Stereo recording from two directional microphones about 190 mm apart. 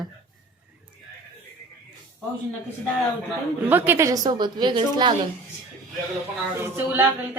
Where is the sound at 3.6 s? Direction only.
10° right (ahead or behind).